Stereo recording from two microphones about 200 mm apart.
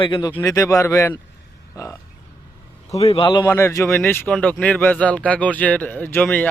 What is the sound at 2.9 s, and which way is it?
Speech, 30° left (ahead or behind).